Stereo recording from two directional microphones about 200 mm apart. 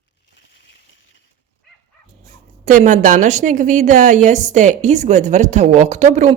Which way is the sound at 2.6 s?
40° right (ahead or behind).